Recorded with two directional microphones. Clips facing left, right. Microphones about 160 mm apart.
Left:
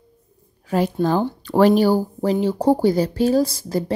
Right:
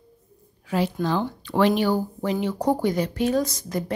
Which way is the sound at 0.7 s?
45° left (ahead or behind).